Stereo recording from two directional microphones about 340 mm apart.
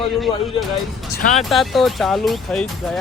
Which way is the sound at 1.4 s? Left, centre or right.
Centre.